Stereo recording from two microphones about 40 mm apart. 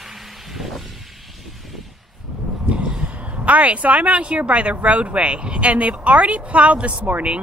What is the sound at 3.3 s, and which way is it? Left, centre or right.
Speech, right.